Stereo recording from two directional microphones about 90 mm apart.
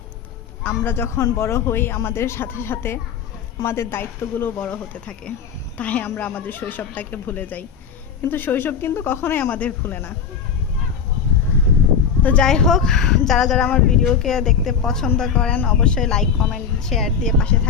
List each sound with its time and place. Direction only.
0.9 s speech: 25° left (ahead or behind)
4.5 s a woman's voice: 15° left (ahead or behind)
12.2 s speech: 10° left (ahead or behind)